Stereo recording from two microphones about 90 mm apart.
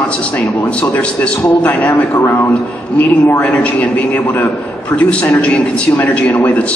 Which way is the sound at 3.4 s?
15° left (ahead or behind).